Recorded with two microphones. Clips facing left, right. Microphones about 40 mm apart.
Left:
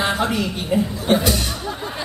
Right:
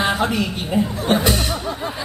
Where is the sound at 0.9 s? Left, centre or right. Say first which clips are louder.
Even; right.